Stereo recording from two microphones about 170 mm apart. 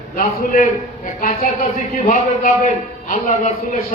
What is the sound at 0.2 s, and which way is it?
Speech, 50° left (ahead or behind).